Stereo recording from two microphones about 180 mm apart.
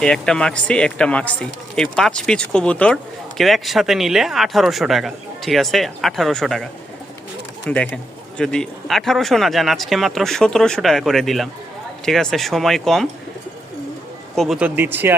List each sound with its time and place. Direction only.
0.0 s speech: 5° left (ahead or behind)
7.7 s speech: 5° left (ahead or behind)
14.3 s speech: centre (ahead or behind)